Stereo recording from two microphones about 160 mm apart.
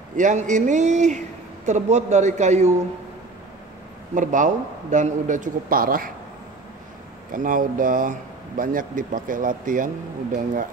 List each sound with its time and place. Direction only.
0.1 s a man's voice: 50° right (ahead or behind)
4.1 s a man's voice: 50° right (ahead or behind)
7.3 s speech: 60° right (ahead or behind)